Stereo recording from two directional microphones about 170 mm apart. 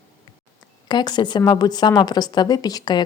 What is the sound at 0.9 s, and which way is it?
A woman's voice, 25° left (ahead or behind).